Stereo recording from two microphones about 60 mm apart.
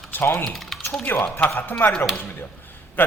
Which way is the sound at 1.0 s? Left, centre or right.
Left.